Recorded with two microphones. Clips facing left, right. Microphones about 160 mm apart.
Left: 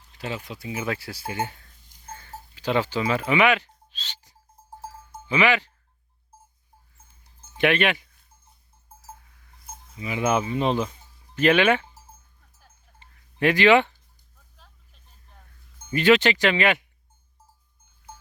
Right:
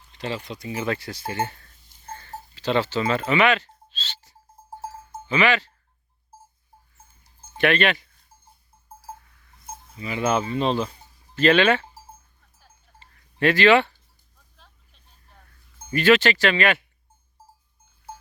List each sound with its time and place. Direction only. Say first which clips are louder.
0.1 s speech: right 2 dB; 10° left (ahead or behind)
3.9 s music: right 4 dB; 15° left (ahead or behind)
4.8 s cowbell: right 4 dB; 25° right (ahead or behind)
5.3 s speech: even; 15° left (ahead or behind)
7.6 s speech: right 1 dB; 15° left (ahead or behind)
10.0 s speech: even; 10° left (ahead or behind)
13.0 s a sound: right 1 dB; 15° left (ahead or behind)
15.9 s speech: even; 20° left (ahead or behind)